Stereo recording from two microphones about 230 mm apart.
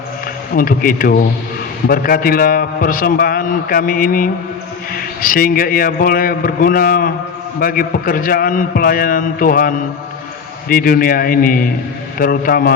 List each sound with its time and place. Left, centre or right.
0.5 s a man's voice: left